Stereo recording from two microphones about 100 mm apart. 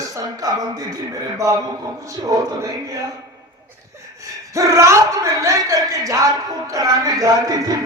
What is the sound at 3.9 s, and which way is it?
Speech, 35° right (ahead or behind).